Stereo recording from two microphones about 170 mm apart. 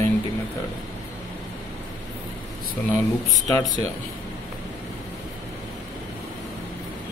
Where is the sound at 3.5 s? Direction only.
20° left (ahead or behind).